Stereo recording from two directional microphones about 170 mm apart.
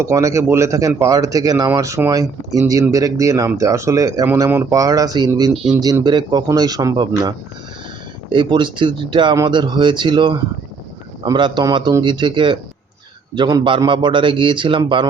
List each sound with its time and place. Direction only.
0.0 s speech: 20° right (ahead or behind)